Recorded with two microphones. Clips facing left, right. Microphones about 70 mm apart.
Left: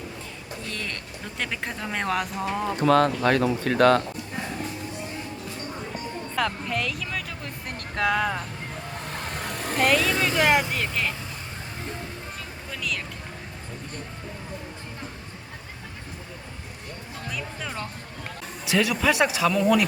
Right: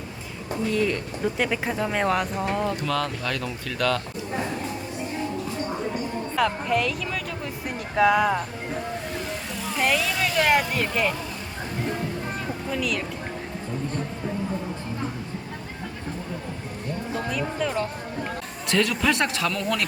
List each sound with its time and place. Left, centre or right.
0.7 s speech: centre
2.8 s speech: left
6.3 s speech: centre
9.2 s vehicle: left
9.8 s speech: centre
12.7 s speech: centre
17.2 s a man's voice: centre